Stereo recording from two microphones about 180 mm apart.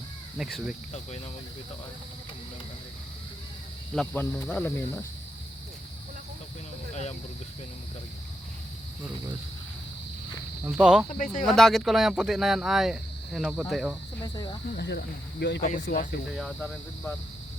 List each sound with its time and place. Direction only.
0.3 s speech: centre (ahead or behind)
3.9 s speech: 10° left (ahead or behind)
6.9 s speech: 40° left (ahead or behind)
10.6 s speech: 5° right (ahead or behind)
11.2 s speech: 45° left (ahead or behind)
11.4 s speech: centre (ahead or behind)
14.8 s speech: 65° left (ahead or behind)
16.3 s speech: centre (ahead or behind)